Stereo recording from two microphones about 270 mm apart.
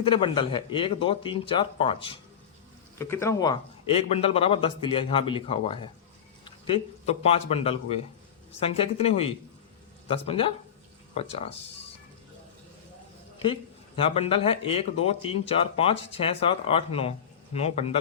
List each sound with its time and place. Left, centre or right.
0.0 s speech: centre
14.0 s speech: left